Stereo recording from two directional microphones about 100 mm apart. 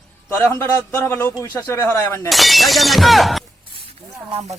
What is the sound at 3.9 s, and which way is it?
Speech, 80° right.